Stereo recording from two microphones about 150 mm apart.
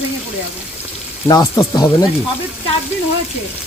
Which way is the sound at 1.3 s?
25° left (ahead or behind).